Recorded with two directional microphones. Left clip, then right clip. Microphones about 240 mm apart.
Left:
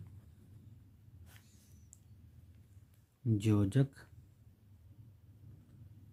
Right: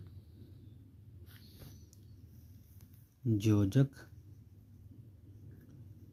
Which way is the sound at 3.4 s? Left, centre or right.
Centre.